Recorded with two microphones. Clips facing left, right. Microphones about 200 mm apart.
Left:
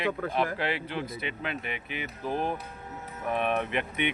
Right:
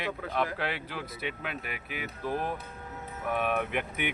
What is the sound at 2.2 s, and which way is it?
Speech, 30° left (ahead or behind).